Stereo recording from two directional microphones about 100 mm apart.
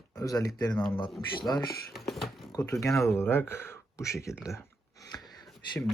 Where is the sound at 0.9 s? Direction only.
55° left (ahead or behind).